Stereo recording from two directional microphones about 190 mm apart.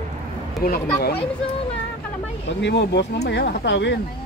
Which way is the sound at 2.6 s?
65° left (ahead or behind).